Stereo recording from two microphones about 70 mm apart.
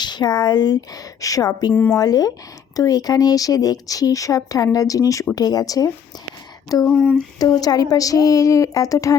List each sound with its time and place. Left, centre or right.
0.0 s a woman's voice: left